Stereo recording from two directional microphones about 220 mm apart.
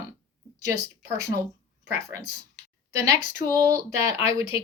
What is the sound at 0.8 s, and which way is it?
Speech, 15° right (ahead or behind).